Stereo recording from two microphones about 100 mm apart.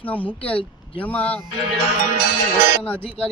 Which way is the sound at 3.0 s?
65° left (ahead or behind).